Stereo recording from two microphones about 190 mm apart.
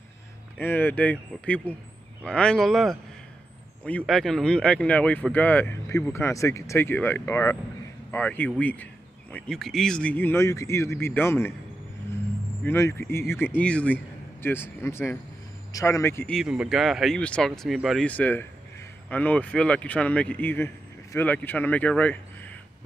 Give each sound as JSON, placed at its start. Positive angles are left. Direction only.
{"t": 0.6, "sound": "speech", "side_deg": 10}
{"t": 12.6, "sound": "speech", "side_deg": 15}